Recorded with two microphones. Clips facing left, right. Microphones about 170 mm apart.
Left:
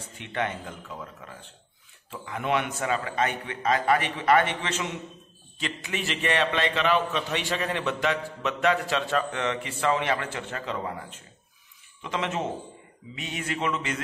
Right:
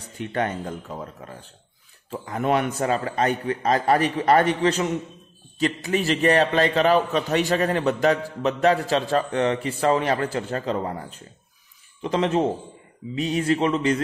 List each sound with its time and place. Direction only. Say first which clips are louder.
0.2 s a man's voice: right 5 dB; 40° right (ahead or behind)